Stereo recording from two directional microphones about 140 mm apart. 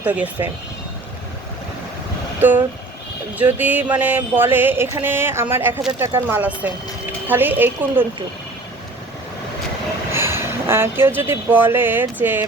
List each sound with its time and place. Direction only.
0.0 s speech: 10° right (ahead or behind)
3.3 s speech: 10° right (ahead or behind)
10.1 s speech: 15° right (ahead or behind)